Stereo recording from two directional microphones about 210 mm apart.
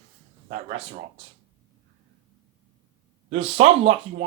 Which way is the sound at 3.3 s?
30° right (ahead or behind).